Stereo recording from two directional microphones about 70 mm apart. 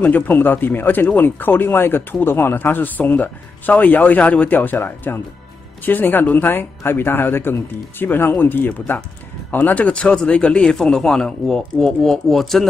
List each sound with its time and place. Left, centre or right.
0.0 s a man's voice: left; by 12.6 s centre